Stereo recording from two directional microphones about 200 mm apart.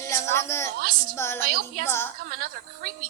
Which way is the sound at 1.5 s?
50° right (ahead or behind).